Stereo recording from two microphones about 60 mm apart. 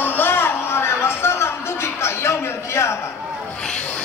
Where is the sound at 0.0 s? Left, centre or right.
Left.